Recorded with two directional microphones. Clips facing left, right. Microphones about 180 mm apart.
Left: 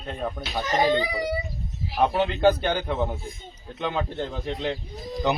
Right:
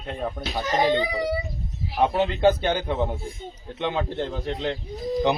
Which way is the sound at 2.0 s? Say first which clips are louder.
Right 1 dB; centre (ahead or behind).